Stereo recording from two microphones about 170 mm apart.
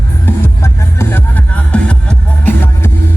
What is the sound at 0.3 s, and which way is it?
Music, 15° left (ahead or behind).